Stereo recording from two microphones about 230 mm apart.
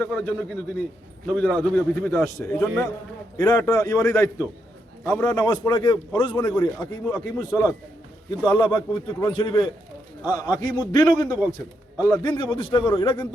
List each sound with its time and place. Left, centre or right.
0.0 s a man's voice: centre; by 13.2 s left